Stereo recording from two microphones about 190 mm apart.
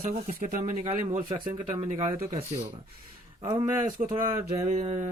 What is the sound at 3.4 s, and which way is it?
Speech, 15° right (ahead or behind).